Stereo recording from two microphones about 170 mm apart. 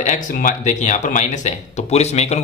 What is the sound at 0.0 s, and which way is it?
Speech, 50° left (ahead or behind).